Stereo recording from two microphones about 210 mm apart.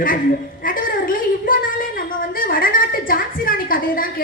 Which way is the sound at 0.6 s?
40° left (ahead or behind).